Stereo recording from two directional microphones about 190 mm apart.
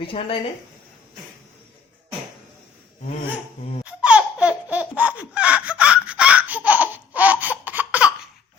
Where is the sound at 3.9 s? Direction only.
5° right (ahead or behind).